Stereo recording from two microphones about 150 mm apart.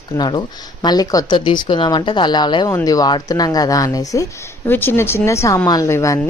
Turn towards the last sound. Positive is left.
turn(degrees=20)  # may be behind; listen again after turning